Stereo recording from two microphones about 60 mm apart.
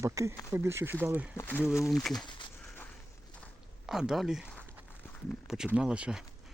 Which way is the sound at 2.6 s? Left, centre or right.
Left.